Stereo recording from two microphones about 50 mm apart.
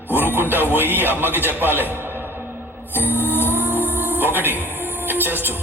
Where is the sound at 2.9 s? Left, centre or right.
Right.